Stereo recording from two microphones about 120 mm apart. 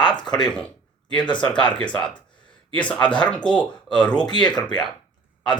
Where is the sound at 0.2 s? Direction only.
35° left (ahead or behind).